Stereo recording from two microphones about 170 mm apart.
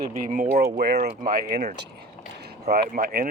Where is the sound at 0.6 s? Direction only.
70° right (ahead or behind).